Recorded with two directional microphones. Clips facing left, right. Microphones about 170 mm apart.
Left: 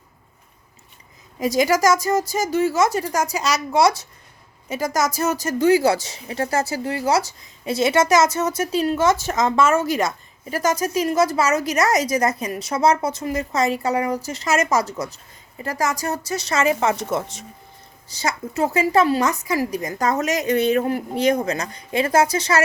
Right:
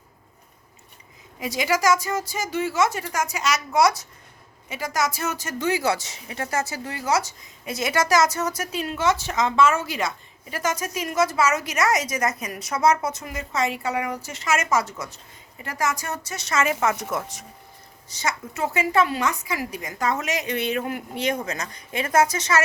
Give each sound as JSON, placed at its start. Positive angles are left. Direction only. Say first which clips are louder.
{"t": 1.4, "sound": "a woman's voice", "louder": "left 6 dB", "side_deg": 40}
{"t": 4.7, "sound": "a woman's voice", "louder": "left 4 dB", "side_deg": 40}